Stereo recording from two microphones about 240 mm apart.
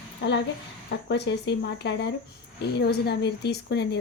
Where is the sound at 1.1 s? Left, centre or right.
Left.